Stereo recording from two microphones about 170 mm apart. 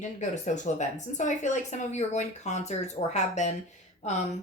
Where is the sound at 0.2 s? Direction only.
45° left (ahead or behind).